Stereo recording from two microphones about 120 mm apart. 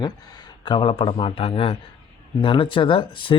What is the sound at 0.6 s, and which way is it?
Speech, 45° left (ahead or behind).